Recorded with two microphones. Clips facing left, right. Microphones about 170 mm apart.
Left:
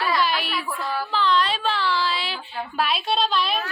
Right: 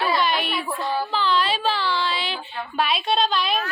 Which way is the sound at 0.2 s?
Centre (ahead or behind).